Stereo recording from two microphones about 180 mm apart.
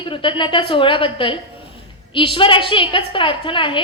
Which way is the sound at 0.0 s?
30° left (ahead or behind).